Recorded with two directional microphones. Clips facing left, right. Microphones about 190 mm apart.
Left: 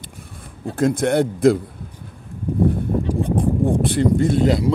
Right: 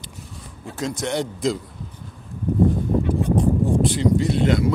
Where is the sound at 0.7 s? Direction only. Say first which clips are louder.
Left 8 dB; 55° left (ahead or behind).